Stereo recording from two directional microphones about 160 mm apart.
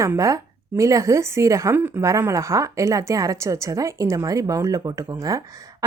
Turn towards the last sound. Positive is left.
turn(degrees=-20)  # may be behind; listen again after turning